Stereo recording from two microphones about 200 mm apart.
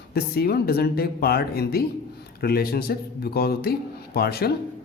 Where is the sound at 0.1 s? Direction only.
50° left (ahead or behind).